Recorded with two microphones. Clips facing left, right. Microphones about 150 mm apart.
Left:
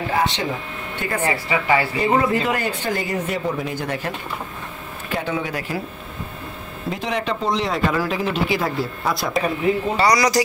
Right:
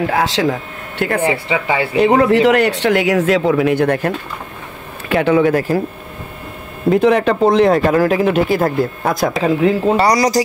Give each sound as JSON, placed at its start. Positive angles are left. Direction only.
{"t": 0.1, "sound": "speech", "side_deg": -90}
{"t": 1.3, "sound": "a woman's voice", "side_deg": -20}
{"t": 2.0, "sound": "speech", "side_deg": -75}
{"t": 5.1, "sound": "speech", "side_deg": -70}
{"t": 6.9, "sound": "speech", "side_deg": -55}
{"t": 9.9, "sound": "speech", "side_deg": -35}